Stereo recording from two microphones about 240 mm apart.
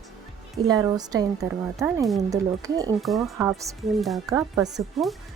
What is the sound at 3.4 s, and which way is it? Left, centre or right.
Speech, centre.